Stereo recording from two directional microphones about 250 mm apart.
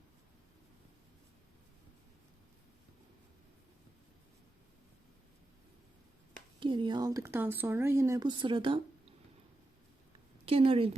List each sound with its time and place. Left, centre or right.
6.6 s speech: centre
10.4 s a woman's voice: right